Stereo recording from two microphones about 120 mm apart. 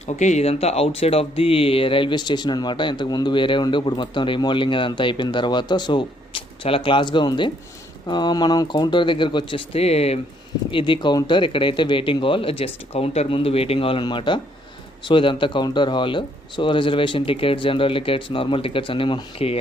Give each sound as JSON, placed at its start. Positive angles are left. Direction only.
{"t": 0.2, "sound": "speech", "side_deg": 75}
{"t": 10.7, "sound": "speech", "side_deg": 45}